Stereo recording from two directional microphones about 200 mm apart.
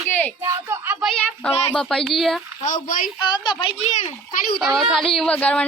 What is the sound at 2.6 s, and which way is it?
Speech, 40° left (ahead or behind).